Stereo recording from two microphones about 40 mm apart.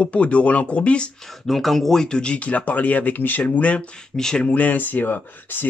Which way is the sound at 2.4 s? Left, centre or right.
Left.